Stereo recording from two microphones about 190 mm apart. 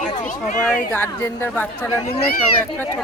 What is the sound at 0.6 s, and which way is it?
Speech, 10° left (ahead or behind).